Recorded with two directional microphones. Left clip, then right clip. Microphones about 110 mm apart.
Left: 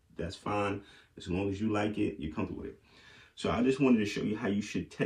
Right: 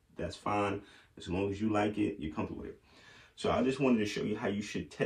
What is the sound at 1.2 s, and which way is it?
Speech, 25° right (ahead or behind).